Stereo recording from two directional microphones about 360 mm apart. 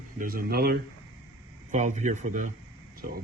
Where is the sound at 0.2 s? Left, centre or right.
Right.